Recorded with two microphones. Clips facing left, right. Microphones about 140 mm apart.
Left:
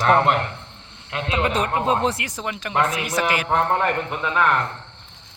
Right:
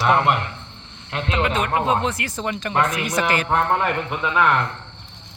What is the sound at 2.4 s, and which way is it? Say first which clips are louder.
Speech: right 1 dB; 5° left (ahead or behind).